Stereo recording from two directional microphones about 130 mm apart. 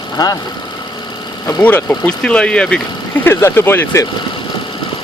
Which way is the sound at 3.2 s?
20° left (ahead or behind).